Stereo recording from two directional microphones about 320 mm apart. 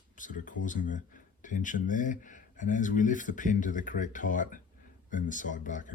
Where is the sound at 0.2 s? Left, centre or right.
Left.